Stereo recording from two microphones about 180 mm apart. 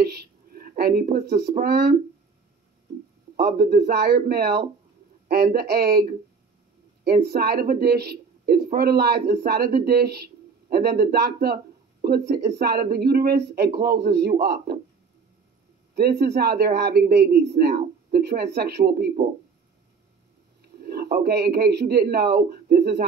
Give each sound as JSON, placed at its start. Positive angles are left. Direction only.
{"t": 0.0, "sound": "speech", "side_deg": -60}
{"t": 3.3, "sound": "speech", "side_deg": -60}
{"t": 15.9, "sound": "speech", "side_deg": -65}
{"t": 20.6, "sound": "speech", "side_deg": -60}